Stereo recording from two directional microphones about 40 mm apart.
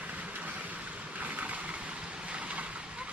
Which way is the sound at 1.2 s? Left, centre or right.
Right.